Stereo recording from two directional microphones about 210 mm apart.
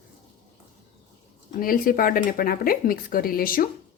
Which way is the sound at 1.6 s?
40° left (ahead or behind).